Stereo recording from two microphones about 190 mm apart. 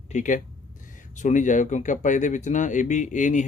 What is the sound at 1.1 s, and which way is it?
Speech, 40° left (ahead or behind).